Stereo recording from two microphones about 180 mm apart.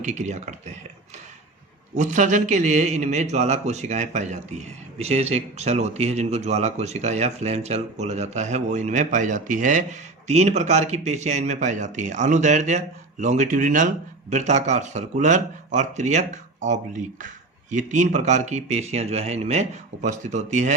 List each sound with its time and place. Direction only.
0.0 s speech: 40° right (ahead or behind)
2.0 s speech: 40° right (ahead or behind)